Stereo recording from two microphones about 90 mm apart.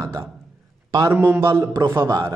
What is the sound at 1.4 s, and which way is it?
Speech, 35° right (ahead or behind).